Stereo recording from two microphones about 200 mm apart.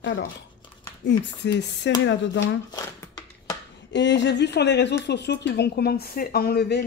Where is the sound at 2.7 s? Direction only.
15° left (ahead or behind).